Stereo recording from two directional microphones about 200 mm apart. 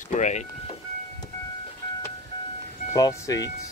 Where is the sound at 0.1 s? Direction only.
35° left (ahead or behind).